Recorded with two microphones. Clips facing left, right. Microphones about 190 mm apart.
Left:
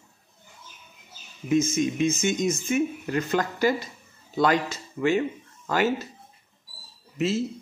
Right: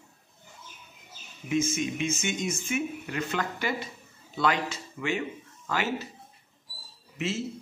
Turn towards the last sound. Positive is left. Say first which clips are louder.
# left 6 dB
turn(degrees=35)  # may be behind; listen again after turning